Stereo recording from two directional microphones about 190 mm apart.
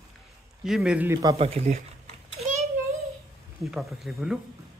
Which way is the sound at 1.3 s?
30° right (ahead or behind).